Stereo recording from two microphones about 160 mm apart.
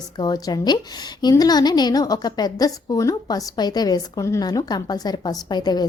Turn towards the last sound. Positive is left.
turn(degrees=25)  # may be behind; listen again after turning